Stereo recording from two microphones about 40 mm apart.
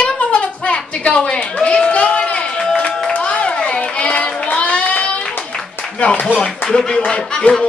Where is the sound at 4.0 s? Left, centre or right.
Left.